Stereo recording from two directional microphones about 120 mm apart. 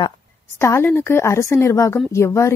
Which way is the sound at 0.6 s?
20° left (ahead or behind).